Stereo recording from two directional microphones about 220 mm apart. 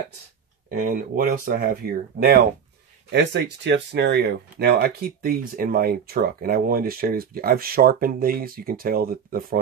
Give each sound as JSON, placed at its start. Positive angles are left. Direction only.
{"t": 0.7, "sound": "speech", "side_deg": -40}